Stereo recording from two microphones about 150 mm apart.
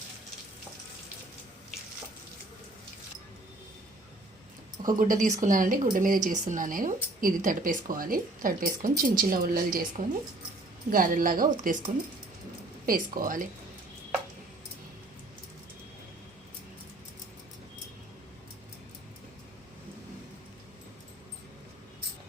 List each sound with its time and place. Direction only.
4.8 s a woman's voice: 65° right (ahead or behind)
12.8 s a woman's voice: 65° right (ahead or behind)